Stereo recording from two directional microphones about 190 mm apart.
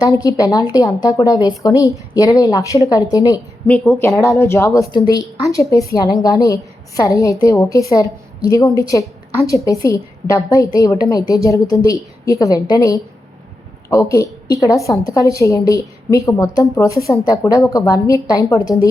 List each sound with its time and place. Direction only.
0.0 s a woman's voice: 20° left (ahead or behind)